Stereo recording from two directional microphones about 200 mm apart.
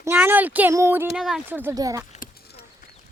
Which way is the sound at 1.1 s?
5° right (ahead or behind).